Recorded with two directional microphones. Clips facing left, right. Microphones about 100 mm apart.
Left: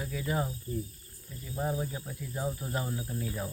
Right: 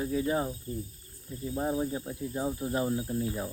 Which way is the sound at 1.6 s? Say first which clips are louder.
Right 3 dB; 20° right (ahead or behind).